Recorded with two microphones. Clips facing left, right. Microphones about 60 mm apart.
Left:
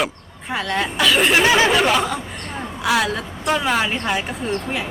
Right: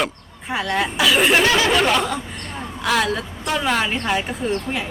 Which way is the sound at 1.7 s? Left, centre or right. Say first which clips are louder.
Left 1 dB; centre.